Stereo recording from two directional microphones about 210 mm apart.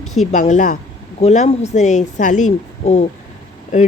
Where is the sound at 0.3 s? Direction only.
35° left (ahead or behind).